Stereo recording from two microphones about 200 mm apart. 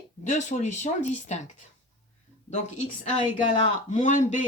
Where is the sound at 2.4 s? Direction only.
35° left (ahead or behind).